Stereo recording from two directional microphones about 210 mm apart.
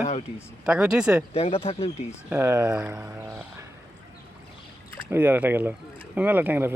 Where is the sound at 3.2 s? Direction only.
15° right (ahead or behind).